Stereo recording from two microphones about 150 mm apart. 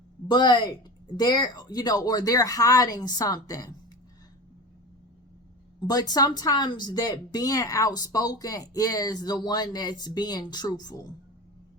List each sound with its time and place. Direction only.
0.3 s speech: 30° left (ahead or behind)
5.9 s speech: 25° left (ahead or behind)